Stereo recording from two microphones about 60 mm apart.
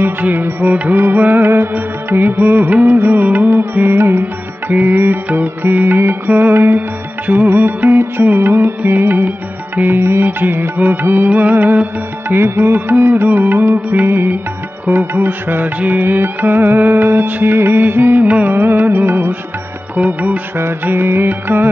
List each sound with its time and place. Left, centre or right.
0.0 s music: right
12.4 s music: right
20.5 s music: right